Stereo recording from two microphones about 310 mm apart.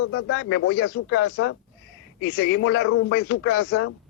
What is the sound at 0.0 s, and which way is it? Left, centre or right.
A man's voice, left.